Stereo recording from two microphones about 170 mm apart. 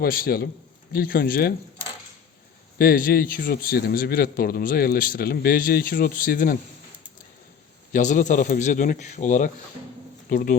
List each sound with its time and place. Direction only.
0.0 s a man's voice: 60° left (ahead or behind)
2.7 s a man's voice: 60° left (ahead or behind)
7.9 s a man's voice: 50° left (ahead or behind)